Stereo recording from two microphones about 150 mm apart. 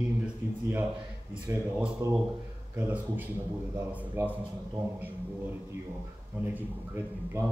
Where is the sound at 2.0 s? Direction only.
20° right (ahead or behind).